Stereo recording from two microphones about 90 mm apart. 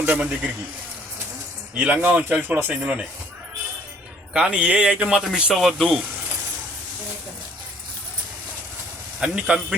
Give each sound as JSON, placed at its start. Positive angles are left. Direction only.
{"t": 0.0, "sound": "a man's voice", "side_deg": -20}
{"t": 1.7, "sound": "speech", "side_deg": -15}
{"t": 4.4, "sound": "speech", "side_deg": -10}
{"t": 9.2, "sound": "speech", "side_deg": -10}